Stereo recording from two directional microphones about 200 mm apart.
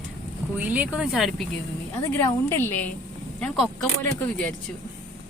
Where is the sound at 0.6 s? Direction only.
10° right (ahead or behind).